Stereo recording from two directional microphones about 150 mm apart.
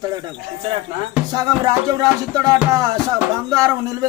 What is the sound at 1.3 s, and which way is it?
Speech, 25° right (ahead or behind).